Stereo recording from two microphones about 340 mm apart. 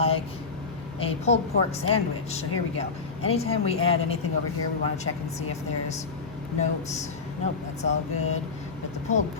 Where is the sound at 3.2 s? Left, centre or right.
Centre.